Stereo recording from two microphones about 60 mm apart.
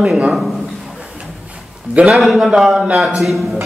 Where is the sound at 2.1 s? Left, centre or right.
Centre.